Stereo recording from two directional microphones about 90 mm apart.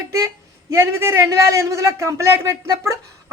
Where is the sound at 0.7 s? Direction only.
30° right (ahead or behind).